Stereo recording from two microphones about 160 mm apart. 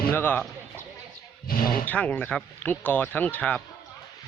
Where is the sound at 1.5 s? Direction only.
65° left (ahead or behind).